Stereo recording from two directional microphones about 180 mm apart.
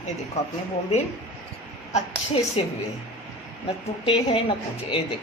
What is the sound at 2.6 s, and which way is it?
Speech, 30° left (ahead or behind).